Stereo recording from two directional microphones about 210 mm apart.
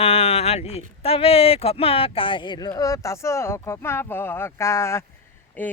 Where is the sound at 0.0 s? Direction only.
30° left (ahead or behind).